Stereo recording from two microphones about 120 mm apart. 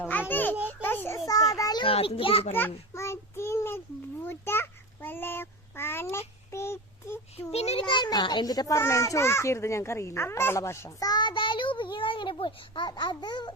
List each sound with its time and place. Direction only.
0.0 s a sound: 15° left (ahead or behind)
0.7 s a child's voice: 15° left (ahead or behind)
1.2 s children playing: 30° left (ahead or behind)
1.8 s a child's voice: 50° left (ahead or behind)
2.6 s child singing: 20° left (ahead or behind)
7.5 s a sound: 60° left (ahead or behind)
7.9 s a child's voice: 35° left (ahead or behind)